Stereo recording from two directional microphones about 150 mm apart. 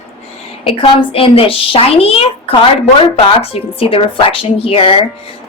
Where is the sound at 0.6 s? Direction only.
40° left (ahead or behind).